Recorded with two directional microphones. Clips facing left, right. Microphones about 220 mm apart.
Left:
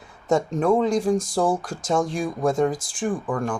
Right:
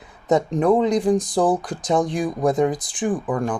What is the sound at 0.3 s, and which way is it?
Speech, 20° right (ahead or behind).